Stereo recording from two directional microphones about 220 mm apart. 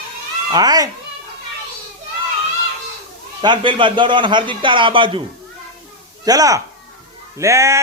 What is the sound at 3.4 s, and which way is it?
A man's voice, 20° right (ahead or behind).